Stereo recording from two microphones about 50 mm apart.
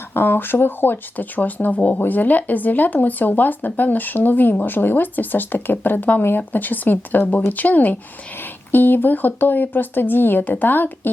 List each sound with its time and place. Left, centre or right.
0.1 s speech: left